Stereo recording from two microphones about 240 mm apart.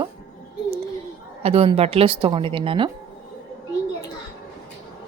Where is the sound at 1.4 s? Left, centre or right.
Right.